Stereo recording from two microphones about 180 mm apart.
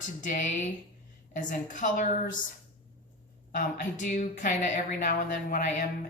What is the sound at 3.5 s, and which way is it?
Speech, 45° left (ahead or behind).